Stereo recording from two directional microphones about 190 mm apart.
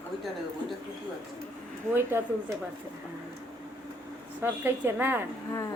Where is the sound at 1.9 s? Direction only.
10° right (ahead or behind).